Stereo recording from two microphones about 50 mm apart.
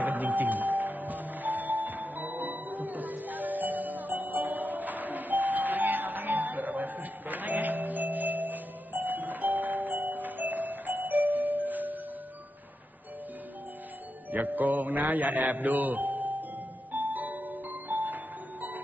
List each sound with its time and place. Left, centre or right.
0.0 s music: right
14.3 s mantra: right
16.9 s music: right